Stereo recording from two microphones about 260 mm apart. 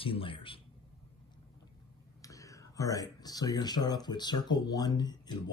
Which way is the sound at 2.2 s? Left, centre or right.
Centre.